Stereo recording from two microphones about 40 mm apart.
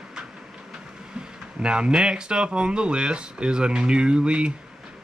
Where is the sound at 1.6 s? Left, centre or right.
Right.